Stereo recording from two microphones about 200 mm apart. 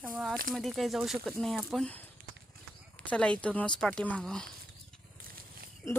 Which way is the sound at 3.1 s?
5° left (ahead or behind).